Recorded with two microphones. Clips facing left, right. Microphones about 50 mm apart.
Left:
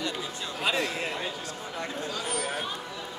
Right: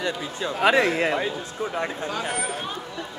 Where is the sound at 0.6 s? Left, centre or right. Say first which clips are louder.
Right 10 dB; right.